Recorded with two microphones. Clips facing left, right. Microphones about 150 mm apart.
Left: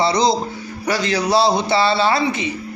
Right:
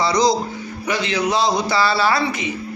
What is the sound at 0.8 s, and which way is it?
A man's voice, 40° left (ahead or behind).